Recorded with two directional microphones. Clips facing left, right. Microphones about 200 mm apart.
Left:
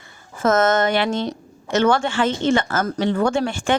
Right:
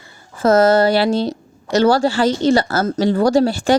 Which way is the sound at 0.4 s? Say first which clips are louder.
Right 5 dB; 35° right (ahead or behind).